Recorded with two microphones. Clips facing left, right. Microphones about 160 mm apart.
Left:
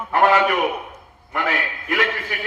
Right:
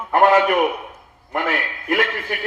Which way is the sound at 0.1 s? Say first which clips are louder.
Right 2 dB; 50° right (ahead or behind).